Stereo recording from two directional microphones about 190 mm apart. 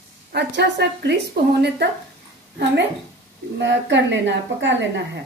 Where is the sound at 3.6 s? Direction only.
70° right (ahead or behind).